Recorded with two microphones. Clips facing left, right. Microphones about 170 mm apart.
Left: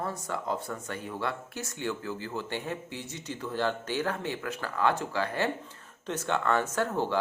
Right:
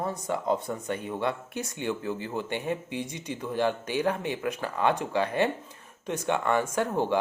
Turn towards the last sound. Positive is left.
turn(degrees=-15)  # may be behind; listen again after turning